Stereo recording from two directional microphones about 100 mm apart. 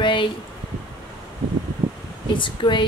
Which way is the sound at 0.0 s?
55° left (ahead or behind).